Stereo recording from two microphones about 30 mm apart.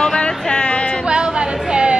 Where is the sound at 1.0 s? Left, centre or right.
Right.